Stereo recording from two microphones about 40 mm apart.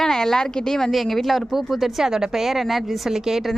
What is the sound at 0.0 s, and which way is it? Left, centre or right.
A woman's voice, centre.